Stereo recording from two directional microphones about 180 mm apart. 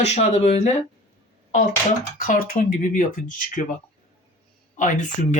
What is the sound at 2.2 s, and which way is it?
Speech, 50° left (ahead or behind).